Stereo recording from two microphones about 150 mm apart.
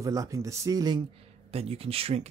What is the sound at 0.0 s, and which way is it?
Speech, 20° right (ahead or behind).